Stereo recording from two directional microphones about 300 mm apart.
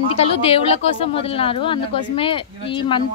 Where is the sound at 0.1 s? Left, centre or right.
Centre.